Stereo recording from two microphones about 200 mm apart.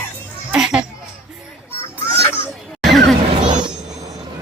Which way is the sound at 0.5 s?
5° right (ahead or behind).